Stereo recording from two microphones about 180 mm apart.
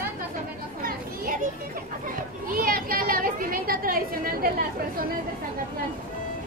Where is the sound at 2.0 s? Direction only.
50° right (ahead or behind).